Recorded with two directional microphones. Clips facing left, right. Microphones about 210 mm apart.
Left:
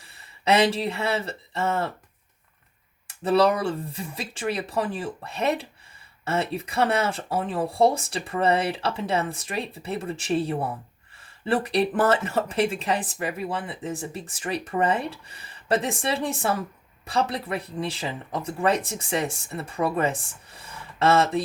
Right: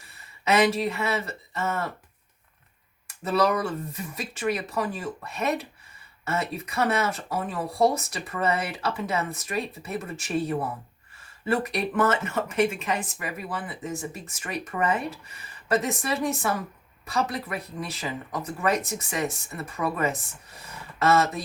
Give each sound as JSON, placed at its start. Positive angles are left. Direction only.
{"t": 0.0, "sound": "speech", "side_deg": 30}
{"t": 3.1, "sound": "speech", "side_deg": 30}